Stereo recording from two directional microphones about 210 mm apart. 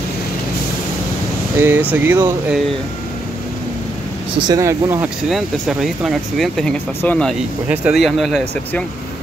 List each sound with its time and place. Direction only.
1.6 s speech: 10° right (ahead or behind)
4.4 s speech: 15° right (ahead or behind)
5.3 s speech: centre (ahead or behind)